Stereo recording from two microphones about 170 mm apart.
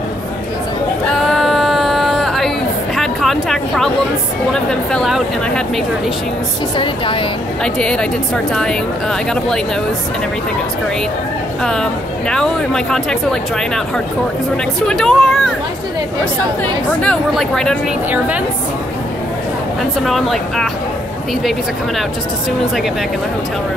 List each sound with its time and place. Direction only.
1.1 s a sound: centre (ahead or behind)
4.5 s speech: 5° left (ahead or behind)
6.8 s a woman's voice: 30° left (ahead or behind)
7.6 s speech: 5° left (ahead or behind)
11.6 s speech: 5° left (ahead or behind)
14.9 s speech: centre (ahead or behind)
17.0 s speech: 5° left (ahead or behind)
20.1 s speech: centre (ahead or behind)